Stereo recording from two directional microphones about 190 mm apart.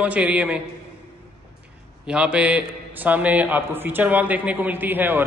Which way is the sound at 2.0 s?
5° right (ahead or behind).